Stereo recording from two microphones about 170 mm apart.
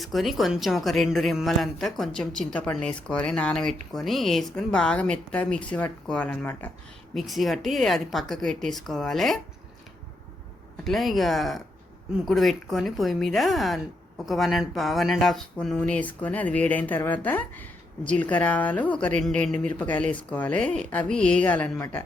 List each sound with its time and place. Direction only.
0.0 s speech: centre (ahead or behind)
7.1 s speech: centre (ahead or behind)
10.8 s speech: centre (ahead or behind)